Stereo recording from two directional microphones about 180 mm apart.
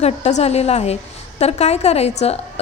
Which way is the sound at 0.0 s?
40° left (ahead or behind).